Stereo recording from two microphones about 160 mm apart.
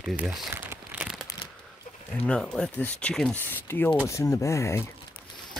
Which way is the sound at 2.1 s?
5° left (ahead or behind).